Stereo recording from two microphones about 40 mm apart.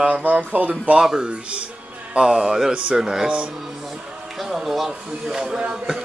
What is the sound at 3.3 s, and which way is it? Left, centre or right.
Speech, right.